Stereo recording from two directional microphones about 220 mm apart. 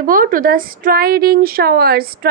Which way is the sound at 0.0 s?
40° right (ahead or behind).